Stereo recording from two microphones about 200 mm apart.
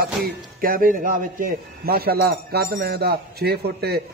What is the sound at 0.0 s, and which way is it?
A man's voice, 50° right (ahead or behind).